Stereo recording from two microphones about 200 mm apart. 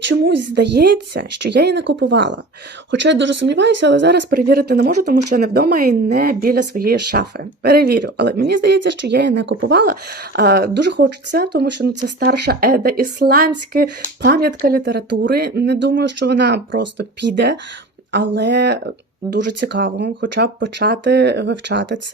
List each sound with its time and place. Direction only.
0.1 s speech: 60° right (ahead or behind)
19.3 s speech: 45° right (ahead or behind)
20.3 s speech: 60° right (ahead or behind)